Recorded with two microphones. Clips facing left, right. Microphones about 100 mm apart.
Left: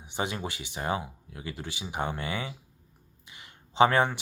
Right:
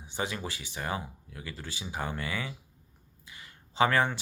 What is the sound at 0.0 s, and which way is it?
Speech, 20° left (ahead or behind).